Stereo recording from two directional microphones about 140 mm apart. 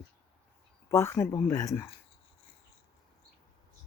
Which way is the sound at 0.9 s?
20° left (ahead or behind).